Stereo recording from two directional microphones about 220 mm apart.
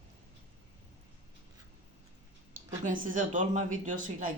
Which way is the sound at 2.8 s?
35° right (ahead or behind).